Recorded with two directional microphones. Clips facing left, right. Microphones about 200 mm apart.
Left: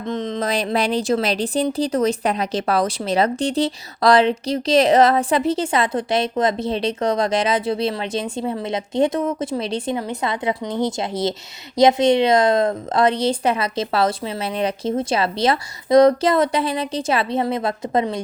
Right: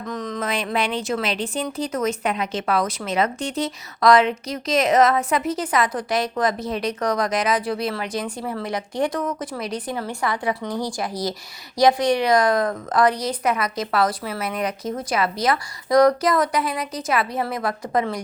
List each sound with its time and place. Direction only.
0.0 s speech: 25° left (ahead or behind)